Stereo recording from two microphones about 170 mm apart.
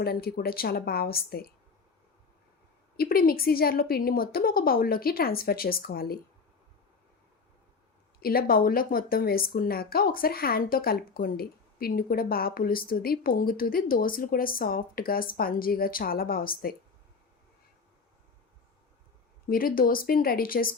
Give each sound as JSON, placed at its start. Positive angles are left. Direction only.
{"t": 0.0, "sound": "a woman's voice", "side_deg": 65}
{"t": 3.0, "sound": "a woman's voice", "side_deg": 60}
{"t": 8.2, "sound": "a woman's voice", "side_deg": 60}
{"t": 19.5, "sound": "a woman's voice", "side_deg": 60}